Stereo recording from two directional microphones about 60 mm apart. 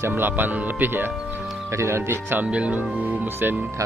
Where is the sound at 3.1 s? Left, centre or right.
Right.